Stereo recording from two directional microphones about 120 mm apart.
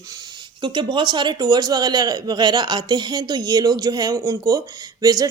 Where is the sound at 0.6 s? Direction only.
40° right (ahead or behind).